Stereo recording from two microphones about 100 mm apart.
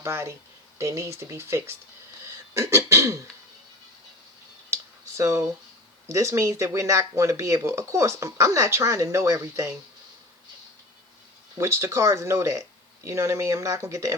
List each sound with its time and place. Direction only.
0.0 s speech: 25° right (ahead or behind)
2.2 s throat clearing: 30° right (ahead or behind)
4.7 s a sound: 30° right (ahead or behind)
6.1 s speech: 30° right (ahead or behind)
11.5 s speech: 30° right (ahead or behind)